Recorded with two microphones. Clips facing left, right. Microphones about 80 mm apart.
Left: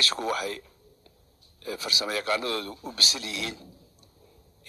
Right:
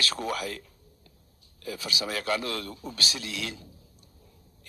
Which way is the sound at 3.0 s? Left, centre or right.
Right.